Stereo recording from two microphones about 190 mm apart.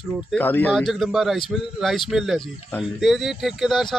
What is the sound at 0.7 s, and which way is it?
Speech, centre (ahead or behind).